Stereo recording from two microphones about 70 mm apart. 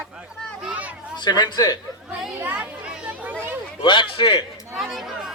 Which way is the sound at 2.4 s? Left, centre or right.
Centre.